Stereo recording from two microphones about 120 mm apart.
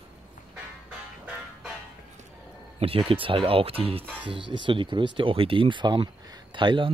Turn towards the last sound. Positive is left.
turn(degrees=-45)  # may be behind; listen again after turning